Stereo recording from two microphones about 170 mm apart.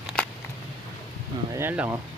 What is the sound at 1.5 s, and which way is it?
Speech, 15° right (ahead or behind).